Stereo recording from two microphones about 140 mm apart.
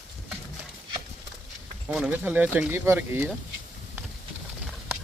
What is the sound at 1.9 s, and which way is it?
Speech, 10° right (ahead or behind).